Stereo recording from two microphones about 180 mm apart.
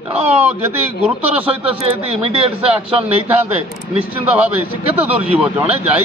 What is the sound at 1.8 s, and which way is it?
Speech, 35° right (ahead or behind).